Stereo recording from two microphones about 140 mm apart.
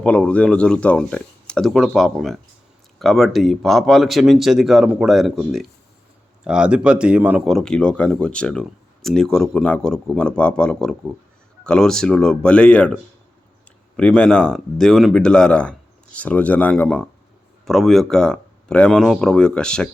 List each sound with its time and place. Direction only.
0.0 s speech: 10° left (ahead or behind); by 7.4 s 10° right (ahead or behind)
7.4 s speech: 5° left (ahead or behind)